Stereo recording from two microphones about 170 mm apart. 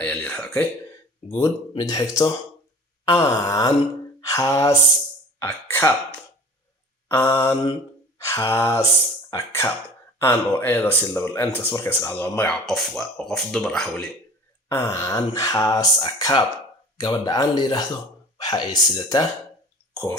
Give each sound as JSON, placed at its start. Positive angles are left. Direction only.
{"t": 0.0, "sound": "speech", "side_deg": 10}
{"t": 14.7, "sound": "speech", "side_deg": 15}
{"t": 19.9, "sound": "speech", "side_deg": 5}